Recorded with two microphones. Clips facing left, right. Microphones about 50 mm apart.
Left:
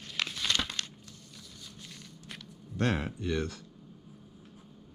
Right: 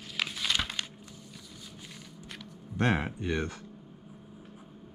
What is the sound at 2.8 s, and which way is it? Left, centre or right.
Speech, centre.